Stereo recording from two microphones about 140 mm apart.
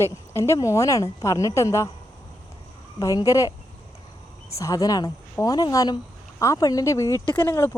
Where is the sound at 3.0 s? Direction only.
25° left (ahead or behind).